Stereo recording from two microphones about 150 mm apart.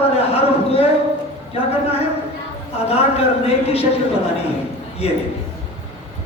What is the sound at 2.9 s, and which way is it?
Speech, 45° left (ahead or behind).